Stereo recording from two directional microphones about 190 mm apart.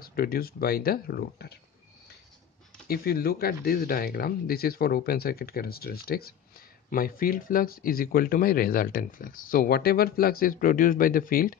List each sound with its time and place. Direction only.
0.0 s speech: 50° left (ahead or behind)
2.9 s speech: 55° left (ahead or behind)